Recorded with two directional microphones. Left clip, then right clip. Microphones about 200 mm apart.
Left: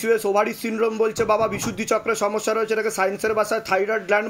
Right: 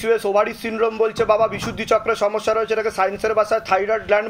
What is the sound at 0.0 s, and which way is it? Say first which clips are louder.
Speech: right 2 dB; 40° left (ahead or behind).